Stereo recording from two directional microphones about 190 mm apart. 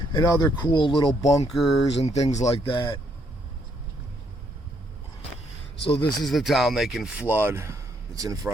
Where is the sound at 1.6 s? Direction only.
Centre (ahead or behind).